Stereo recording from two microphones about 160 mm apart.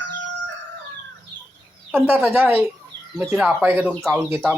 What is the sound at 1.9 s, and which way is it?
Speech, 5° right (ahead or behind).